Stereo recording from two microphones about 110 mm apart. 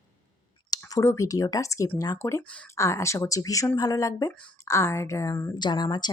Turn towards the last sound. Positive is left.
turn(degrees=40)  # may be behind; listen again after turning